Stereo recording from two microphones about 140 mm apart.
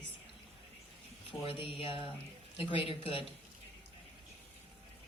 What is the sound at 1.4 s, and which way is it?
A woman's voice, 40° left (ahead or behind).